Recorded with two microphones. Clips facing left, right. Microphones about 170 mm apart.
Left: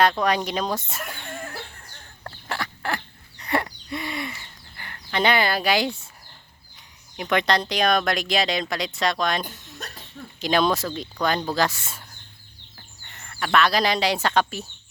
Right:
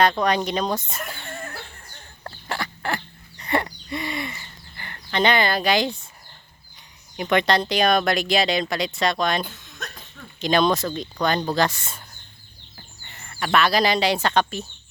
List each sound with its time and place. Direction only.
0.0 s speech: centre (ahead or behind)
1.1 s a sound: 5° right (ahead or behind)
7.2 s speech: centre (ahead or behind)
10.4 s speech: 5° left (ahead or behind)